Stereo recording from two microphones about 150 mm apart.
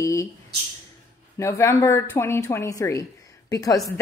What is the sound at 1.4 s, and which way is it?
Speech, 20° left (ahead or behind).